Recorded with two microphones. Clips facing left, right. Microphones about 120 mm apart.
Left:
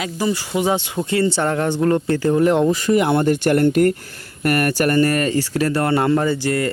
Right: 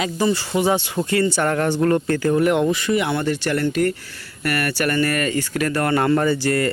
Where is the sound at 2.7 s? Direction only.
40° left (ahead or behind).